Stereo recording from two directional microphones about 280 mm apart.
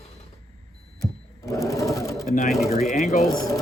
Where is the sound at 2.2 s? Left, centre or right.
Left.